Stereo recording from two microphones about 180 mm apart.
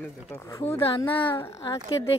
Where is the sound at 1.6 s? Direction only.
25° left (ahead or behind).